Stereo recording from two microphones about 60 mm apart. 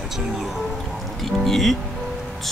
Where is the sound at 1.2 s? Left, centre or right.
Centre.